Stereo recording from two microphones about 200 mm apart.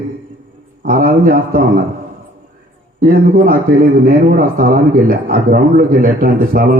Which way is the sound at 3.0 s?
45° right (ahead or behind).